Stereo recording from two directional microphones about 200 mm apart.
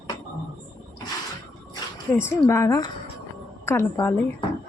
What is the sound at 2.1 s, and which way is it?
Speech, 15° left (ahead or behind).